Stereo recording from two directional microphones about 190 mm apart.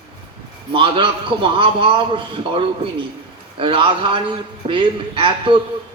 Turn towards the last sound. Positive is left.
turn(degrees=-25)  # may be behind; listen again after turning